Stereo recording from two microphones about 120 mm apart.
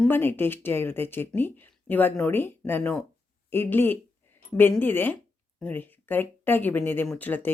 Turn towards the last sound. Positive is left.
turn(degrees=15)  # may be behind; listen again after turning